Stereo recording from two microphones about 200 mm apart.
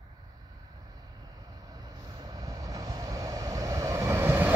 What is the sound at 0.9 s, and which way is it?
Vehicle, 20° right (ahead or behind).